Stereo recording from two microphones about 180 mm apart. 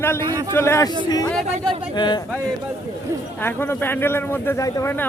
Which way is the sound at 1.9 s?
25° left (ahead or behind).